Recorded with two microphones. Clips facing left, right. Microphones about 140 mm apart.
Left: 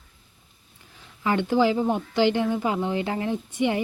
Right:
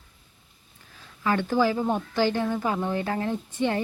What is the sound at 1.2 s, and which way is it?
A woman's voice, 20° left (ahead or behind).